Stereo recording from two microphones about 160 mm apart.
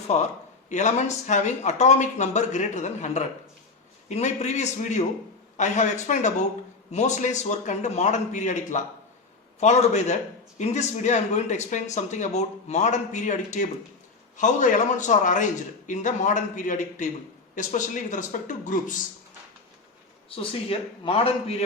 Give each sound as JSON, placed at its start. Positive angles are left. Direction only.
{"t": 0.1, "sound": "speech", "side_deg": 45}
{"t": 20.3, "sound": "a man's voice", "side_deg": 35}